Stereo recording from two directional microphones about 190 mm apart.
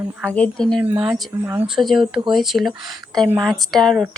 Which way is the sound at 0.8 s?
10° right (ahead or behind).